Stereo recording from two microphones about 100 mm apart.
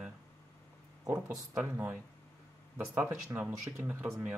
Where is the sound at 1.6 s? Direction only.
20° right (ahead or behind).